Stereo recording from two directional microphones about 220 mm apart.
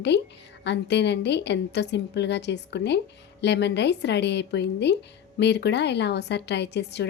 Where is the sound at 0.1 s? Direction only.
50° left (ahead or behind).